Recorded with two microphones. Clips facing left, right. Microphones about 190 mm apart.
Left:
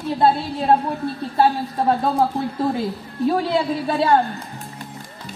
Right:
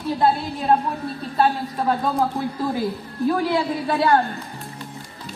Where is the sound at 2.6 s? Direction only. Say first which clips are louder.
Left 1 dB; 25° left (ahead or behind).